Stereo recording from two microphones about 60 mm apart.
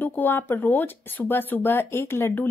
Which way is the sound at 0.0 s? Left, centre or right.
Left.